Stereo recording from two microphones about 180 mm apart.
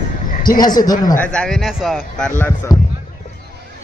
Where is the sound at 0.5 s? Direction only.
20° left (ahead or behind).